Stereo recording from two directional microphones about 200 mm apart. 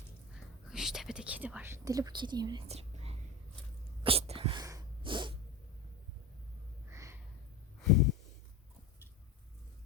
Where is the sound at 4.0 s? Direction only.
30° right (ahead or behind).